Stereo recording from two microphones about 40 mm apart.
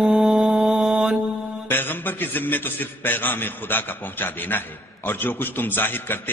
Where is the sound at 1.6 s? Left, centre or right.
Left.